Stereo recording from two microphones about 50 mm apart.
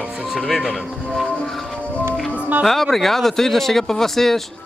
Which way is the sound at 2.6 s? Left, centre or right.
Centre.